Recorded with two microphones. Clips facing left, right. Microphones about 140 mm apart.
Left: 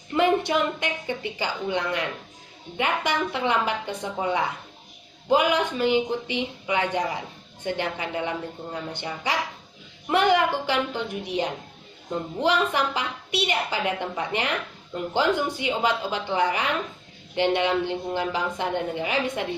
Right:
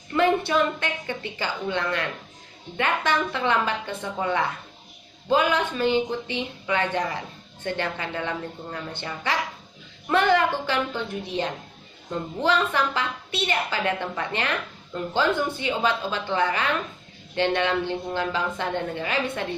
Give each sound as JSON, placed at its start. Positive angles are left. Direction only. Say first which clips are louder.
{"t": 0.1, "sound": "a woman's voice", "louder": "even", "side_deg": 15}